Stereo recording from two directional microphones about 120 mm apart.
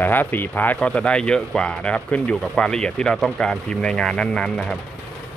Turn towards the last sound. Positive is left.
turn(degrees=5)  # may be behind; listen again after turning